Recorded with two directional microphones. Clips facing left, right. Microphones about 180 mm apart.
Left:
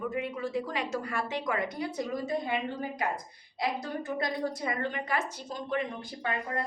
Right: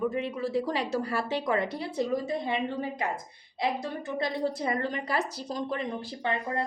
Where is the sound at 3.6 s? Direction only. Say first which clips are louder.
Right 2 dB; 25° right (ahead or behind).